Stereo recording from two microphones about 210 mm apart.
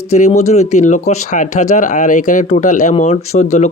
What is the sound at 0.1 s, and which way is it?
Speech, 30° left (ahead or behind).